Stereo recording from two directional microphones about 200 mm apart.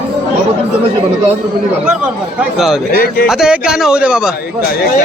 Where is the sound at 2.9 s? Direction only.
45° left (ahead or behind).